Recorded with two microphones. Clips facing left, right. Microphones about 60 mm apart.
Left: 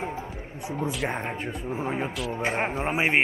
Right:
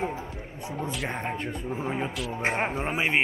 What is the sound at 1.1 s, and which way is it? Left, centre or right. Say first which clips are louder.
Speech: even; centre.